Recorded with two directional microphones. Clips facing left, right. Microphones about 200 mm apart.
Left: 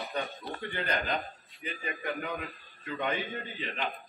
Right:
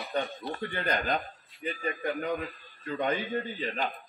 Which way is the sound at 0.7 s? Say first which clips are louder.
Right 2 dB; 45° right (ahead or behind).